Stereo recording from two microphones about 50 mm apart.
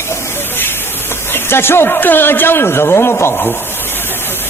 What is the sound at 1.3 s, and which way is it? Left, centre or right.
Speech, left.